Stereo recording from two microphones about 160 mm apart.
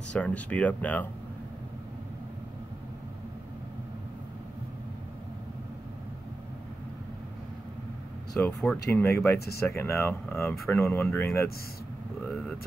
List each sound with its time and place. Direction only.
0.1 s speech: 10° left (ahead or behind)
8.4 s speech: 5° left (ahead or behind)